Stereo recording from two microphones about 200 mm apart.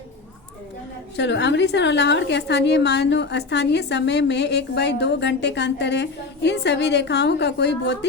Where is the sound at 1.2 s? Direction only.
60° left (ahead or behind).